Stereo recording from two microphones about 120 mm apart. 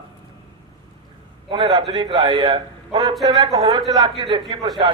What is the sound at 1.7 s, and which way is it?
A man's voice, 35° right (ahead or behind).